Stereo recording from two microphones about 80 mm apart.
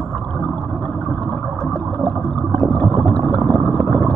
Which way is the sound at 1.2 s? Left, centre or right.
Centre.